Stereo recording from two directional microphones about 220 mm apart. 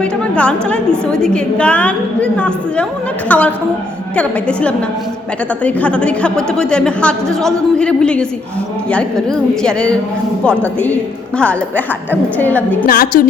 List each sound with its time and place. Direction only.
0.0 s a woman's voice: 5° left (ahead or behind)
12.1 s a woman's voice: 10° left (ahead or behind)
12.8 s a woman's voice: 40° left (ahead or behind)